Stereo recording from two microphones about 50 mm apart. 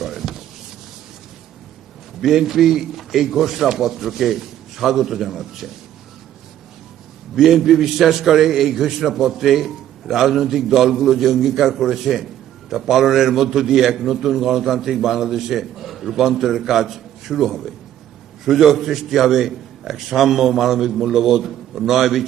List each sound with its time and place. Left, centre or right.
0.0 s a sound: centre
2.2 s a man's voice: centre
7.3 s a man's voice: centre